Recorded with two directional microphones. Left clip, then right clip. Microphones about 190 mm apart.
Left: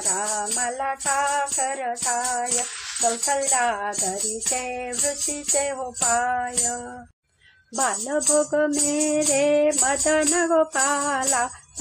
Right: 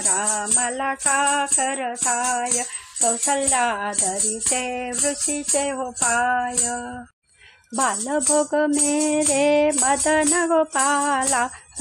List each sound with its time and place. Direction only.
0.1 s music: 40° right (ahead or behind)
7.7 s music: 30° right (ahead or behind)